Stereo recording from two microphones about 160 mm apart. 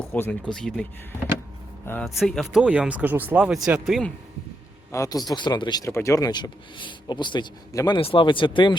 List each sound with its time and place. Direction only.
0.2 s speech: 5° left (ahead or behind)
2.0 s speech: centre (ahead or behind)
4.9 s speech: 20° left (ahead or behind)